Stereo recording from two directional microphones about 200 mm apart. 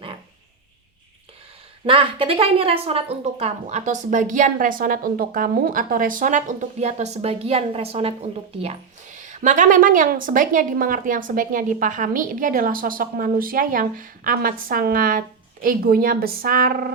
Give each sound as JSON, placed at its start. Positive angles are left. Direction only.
{"t": 1.9, "sound": "a woman's voice", "side_deg": -25}